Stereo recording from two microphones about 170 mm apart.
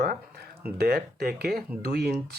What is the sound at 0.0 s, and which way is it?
Speech, 65° right (ahead or behind).